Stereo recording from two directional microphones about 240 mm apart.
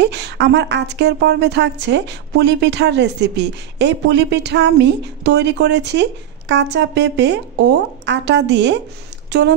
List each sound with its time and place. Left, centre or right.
0.0 s speech: right